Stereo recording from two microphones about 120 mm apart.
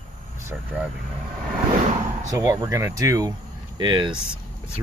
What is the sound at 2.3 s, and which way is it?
Speech, 30° right (ahead or behind).